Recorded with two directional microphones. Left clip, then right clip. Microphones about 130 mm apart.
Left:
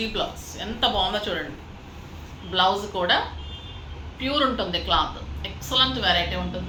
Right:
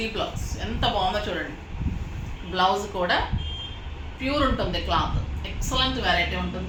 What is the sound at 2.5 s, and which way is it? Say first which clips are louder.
Speech: left 1 dB; centre (ahead or behind).